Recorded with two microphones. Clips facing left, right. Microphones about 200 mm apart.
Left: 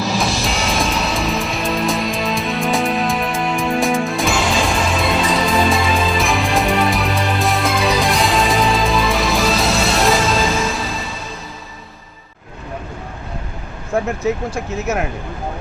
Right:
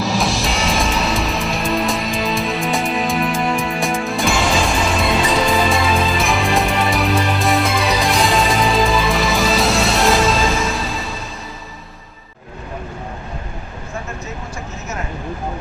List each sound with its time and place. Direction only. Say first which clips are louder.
0.0 s music: even; centre (ahead or behind)
14.5 s speech: left 8 dB; 90° left